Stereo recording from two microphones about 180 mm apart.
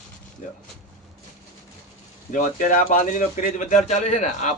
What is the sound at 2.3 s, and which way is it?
Speech, 45° left (ahead or behind).